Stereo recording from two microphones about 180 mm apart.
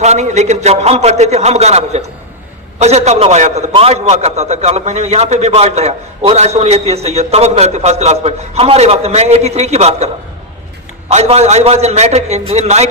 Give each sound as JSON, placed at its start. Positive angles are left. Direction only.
{"t": 0.0, "sound": "a man's voice", "side_deg": -40}
{"t": 11.1, "sound": "a man's voice", "side_deg": -35}